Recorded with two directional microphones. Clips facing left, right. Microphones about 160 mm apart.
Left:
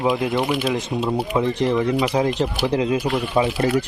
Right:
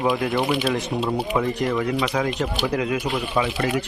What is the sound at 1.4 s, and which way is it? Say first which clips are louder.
Speech: left 5 dB; 20° left (ahead or behind).